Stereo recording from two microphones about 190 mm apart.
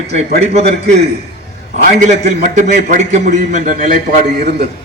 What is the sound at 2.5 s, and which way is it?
A man's voice, 40° right (ahead or behind).